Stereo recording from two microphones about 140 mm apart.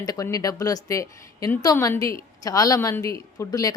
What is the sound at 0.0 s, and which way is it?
A woman's voice, 25° left (ahead or behind).